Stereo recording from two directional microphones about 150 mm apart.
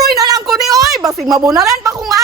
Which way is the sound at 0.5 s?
25° right (ahead or behind).